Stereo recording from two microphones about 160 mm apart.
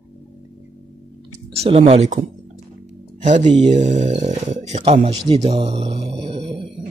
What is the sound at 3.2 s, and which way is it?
Speech, 50° right (ahead or behind).